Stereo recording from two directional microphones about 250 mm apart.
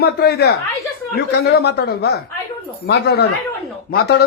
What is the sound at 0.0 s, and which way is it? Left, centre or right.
A man's voice, left.